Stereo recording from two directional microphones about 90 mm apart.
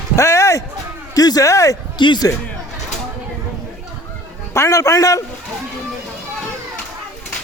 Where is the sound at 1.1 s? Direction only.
45° left (ahead or behind).